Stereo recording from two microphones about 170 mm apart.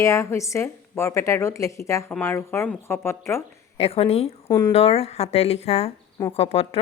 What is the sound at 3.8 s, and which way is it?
Speech, 35° left (ahead or behind).